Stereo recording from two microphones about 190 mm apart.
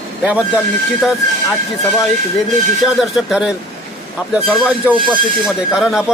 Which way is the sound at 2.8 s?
Centre (ahead or behind).